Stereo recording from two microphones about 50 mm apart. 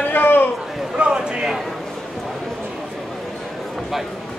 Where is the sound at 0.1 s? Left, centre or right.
Left.